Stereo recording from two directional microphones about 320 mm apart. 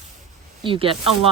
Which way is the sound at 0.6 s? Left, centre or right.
Centre.